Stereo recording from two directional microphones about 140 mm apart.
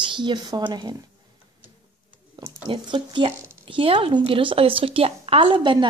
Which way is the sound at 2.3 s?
35° right (ahead or behind).